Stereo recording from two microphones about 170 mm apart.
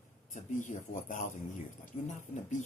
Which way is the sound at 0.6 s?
45° left (ahead or behind).